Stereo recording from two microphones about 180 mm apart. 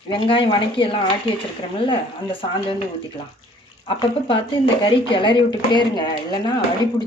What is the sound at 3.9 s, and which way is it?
Speech, 30° left (ahead or behind).